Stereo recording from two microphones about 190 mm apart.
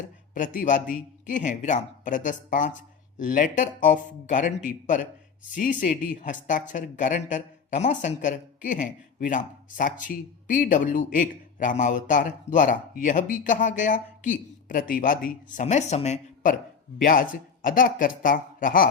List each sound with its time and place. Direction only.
0.3 s a man's voice: 40° left (ahead or behind)